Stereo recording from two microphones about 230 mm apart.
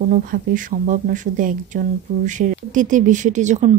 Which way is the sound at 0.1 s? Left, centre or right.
Right.